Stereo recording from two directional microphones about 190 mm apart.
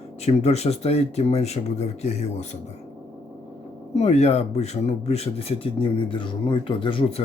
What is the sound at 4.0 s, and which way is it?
Speech, 35° left (ahead or behind).